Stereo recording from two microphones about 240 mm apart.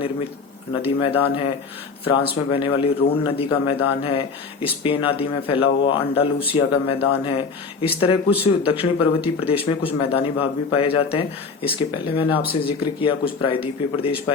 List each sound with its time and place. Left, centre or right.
0.7 s speech: left